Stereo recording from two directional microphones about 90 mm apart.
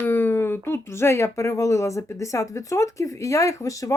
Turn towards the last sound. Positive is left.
turn(degrees=40)  # may be behind; listen again after turning